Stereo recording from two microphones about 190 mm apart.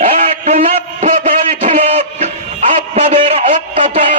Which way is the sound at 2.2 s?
35° right (ahead or behind).